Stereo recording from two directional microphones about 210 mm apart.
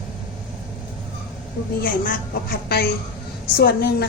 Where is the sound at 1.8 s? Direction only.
45° left (ahead or behind).